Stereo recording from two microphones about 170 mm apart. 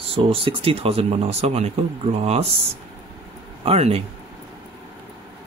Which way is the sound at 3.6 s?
35° right (ahead or behind).